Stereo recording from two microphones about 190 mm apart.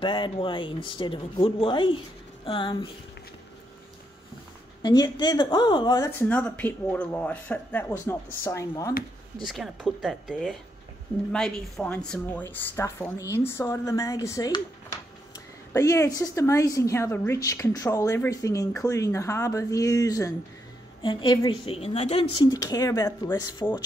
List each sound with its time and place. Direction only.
0.0 s a woman's voice: 25° left (ahead or behind)
4.8 s a woman's voice: 20° left (ahead or behind)
6.1 s a woman's voice: 5° left (ahead or behind)
9.4 s a woman's voice: centre (ahead or behind); by 14.6 s 15° left (ahead or behind)
15.7 s a woman's voice: 15° left (ahead or behind)